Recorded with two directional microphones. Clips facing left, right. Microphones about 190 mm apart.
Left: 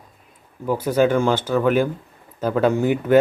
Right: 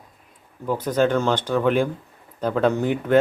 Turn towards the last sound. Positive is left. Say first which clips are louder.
# left 2 dB
turn(degrees=5)  # may be behind; listen again after turning